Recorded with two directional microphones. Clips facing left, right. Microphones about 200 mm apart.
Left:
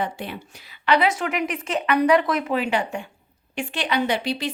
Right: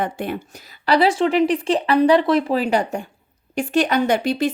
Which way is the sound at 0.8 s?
35° right (ahead or behind).